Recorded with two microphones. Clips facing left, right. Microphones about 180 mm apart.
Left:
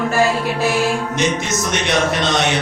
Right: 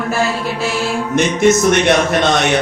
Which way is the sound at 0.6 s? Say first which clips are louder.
Left 3 dB; 15° left (ahead or behind).